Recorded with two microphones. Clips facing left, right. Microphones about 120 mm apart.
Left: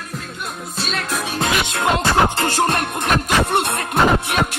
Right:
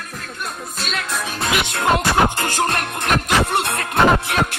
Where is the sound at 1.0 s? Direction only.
10° left (ahead or behind).